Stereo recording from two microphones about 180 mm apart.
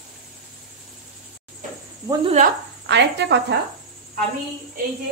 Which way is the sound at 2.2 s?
40° right (ahead or behind).